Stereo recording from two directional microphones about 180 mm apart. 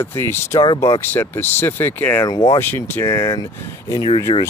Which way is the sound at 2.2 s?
20° left (ahead or behind).